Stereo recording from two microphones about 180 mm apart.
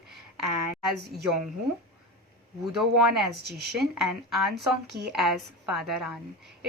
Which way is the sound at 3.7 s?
Centre (ahead or behind).